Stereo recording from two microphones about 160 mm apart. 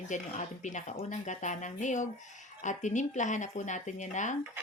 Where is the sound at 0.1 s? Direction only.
50° left (ahead or behind).